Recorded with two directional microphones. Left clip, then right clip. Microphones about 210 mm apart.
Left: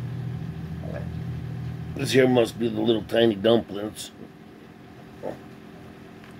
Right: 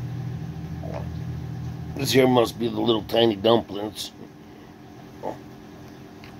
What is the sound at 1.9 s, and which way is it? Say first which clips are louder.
Speech: right 1 dB; 15° left (ahead or behind).